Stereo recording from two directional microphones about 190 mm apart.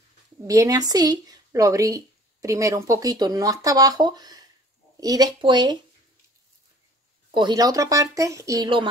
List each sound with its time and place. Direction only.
0.5 s a woman's voice: 20° right (ahead or behind)
7.3 s speech: 20° right (ahead or behind)